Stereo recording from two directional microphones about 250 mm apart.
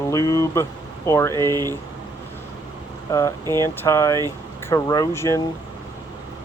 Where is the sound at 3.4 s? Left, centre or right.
Centre.